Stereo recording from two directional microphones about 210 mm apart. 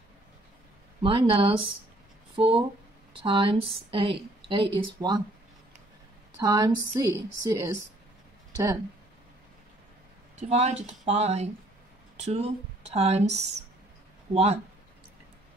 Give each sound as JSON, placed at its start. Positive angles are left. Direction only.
{"t": 1.0, "sound": "a woman's voice", "side_deg": -25}
{"t": 6.4, "sound": "a woman's voice", "side_deg": -15}
{"t": 10.3, "sound": "a woman's voice", "side_deg": -35}